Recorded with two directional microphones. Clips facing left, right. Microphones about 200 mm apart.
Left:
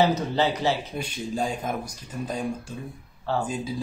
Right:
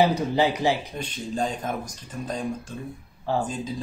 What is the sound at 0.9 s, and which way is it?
Speech, 10° left (ahead or behind).